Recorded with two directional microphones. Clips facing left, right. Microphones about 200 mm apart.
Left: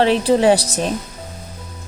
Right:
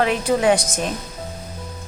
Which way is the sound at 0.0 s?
30° left (ahead or behind).